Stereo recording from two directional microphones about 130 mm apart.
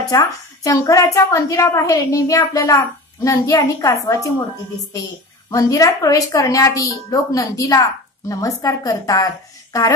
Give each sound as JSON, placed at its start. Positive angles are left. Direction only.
{"t": 0.0, "sound": "a woman's voice", "side_deg": 25}
{"t": 5.5, "sound": "a woman's voice", "side_deg": 25}